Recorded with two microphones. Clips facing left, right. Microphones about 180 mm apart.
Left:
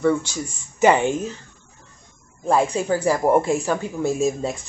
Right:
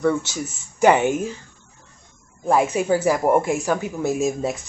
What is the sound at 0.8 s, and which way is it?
Speech, 15° right (ahead or behind).